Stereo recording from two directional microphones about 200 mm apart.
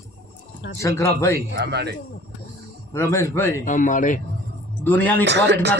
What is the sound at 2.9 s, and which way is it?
Speech, 15° left (ahead or behind).